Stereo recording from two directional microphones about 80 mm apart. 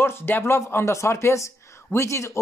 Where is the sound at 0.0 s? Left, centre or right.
Left.